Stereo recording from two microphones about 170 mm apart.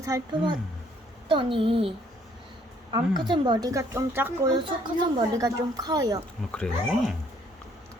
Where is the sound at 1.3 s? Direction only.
30° right (ahead or behind).